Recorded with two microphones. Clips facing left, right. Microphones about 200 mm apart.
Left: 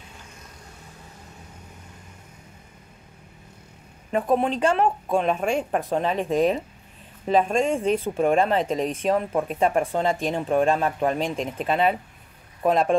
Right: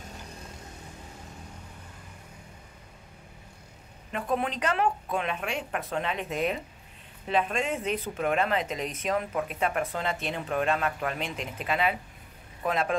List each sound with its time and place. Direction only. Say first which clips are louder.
4.1 s speech: left 8 dB; 30° left (ahead or behind)